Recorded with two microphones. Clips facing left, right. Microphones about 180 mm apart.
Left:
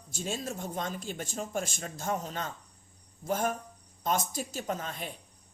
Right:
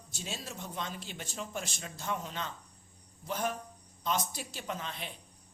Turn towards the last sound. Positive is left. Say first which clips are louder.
# left 4 dB
turn(degrees=45)  # may be behind; listen again after turning